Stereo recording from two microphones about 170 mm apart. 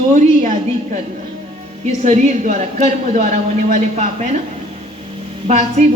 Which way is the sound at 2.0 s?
45° right (ahead or behind).